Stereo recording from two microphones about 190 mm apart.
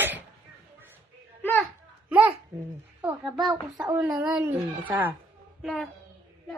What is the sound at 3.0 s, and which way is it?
Speech, 5° right (ahead or behind).